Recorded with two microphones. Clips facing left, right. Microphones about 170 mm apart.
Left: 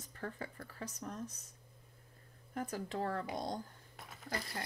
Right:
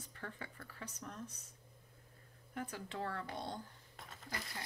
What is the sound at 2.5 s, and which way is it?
A woman's voice, 40° left (ahead or behind).